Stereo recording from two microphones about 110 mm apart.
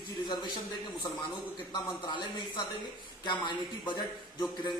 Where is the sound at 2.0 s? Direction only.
45° left (ahead or behind).